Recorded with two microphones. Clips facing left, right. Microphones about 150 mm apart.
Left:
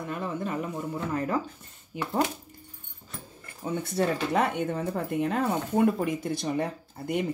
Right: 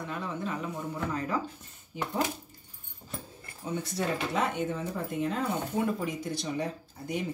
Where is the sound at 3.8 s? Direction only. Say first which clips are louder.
Left 6 dB; 55° left (ahead or behind).